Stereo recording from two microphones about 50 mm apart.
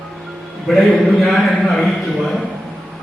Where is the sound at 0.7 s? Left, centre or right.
Centre.